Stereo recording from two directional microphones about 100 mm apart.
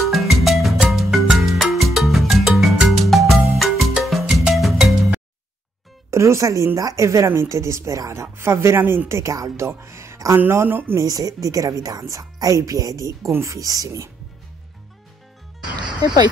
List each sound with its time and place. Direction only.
0.0 s music: centre (ahead or behind)
6.0 s speech: 30° right (ahead or behind)
11.1 s speech: 35° right (ahead or behind)